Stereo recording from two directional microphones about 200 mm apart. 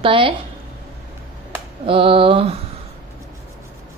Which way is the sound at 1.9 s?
25° right (ahead or behind).